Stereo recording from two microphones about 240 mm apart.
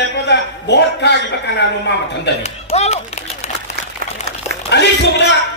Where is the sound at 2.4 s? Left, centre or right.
Left.